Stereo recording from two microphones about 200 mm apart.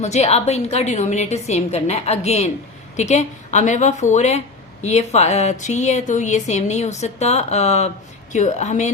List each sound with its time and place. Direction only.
0.0 s speech: 35° left (ahead or behind)